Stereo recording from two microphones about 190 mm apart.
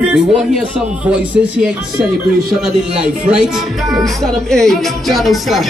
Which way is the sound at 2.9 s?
5° right (ahead or behind).